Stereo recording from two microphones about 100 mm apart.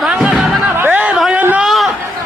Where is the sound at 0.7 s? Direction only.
20° right (ahead or behind).